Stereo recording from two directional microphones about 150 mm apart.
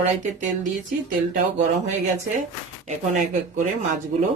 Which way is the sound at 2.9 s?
55° right (ahead or behind).